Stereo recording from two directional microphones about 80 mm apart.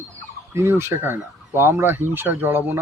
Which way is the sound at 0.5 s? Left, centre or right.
Right.